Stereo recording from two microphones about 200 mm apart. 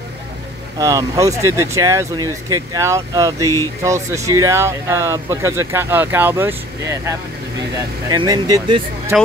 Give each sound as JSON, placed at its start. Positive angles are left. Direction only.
{"t": 0.7, "sound": "speech", "side_deg": -15}
{"t": 9.1, "sound": "speech", "side_deg": -5}